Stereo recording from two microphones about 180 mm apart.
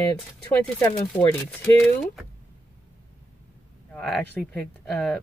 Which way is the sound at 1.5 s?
5° left (ahead or behind).